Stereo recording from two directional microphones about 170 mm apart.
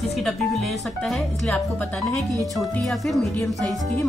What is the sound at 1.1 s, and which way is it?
Speech, 5° left (ahead or behind).